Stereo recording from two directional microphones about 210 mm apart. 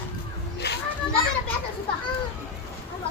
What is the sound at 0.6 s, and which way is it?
Children playing, 50° left (ahead or behind).